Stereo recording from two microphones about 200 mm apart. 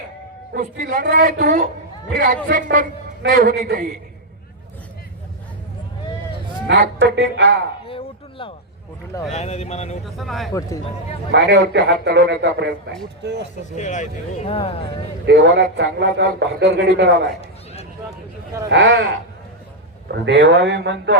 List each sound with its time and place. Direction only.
0.5 s speech: 45° right (ahead or behind)
1.4 s a woman's voice: 40° right (ahead or behind)
2.0 s speech: 50° right (ahead or behind)
6.7 s a man's voice: 55° right (ahead or behind)
7.9 s a sound: 25° left (ahead or behind)
9.3 s speech: 30° left (ahead or behind)
10.2 s speech: centre (ahead or behind)
11.3 s a man's voice: 60° right (ahead or behind)
13.7 s speech: 35° left (ahead or behind)
15.3 s a man's voice: 60° right (ahead or behind)
18.7 s a man's voice: 60° right (ahead or behind)
20.2 s a man's voice: 60° right (ahead or behind)